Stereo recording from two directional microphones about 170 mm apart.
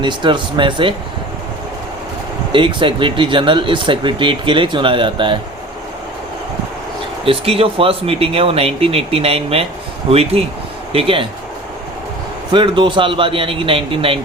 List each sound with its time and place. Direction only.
0.0 s speech: 25° right (ahead or behind)
2.5 s speech: 30° right (ahead or behind)
7.3 s speech: 35° right (ahead or behind)
12.5 s speech: 30° right (ahead or behind)